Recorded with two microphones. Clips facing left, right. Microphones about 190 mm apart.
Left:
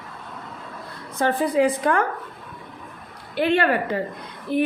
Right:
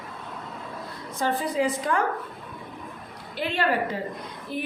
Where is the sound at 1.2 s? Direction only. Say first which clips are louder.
Left 5 dB; 60° left (ahead or behind).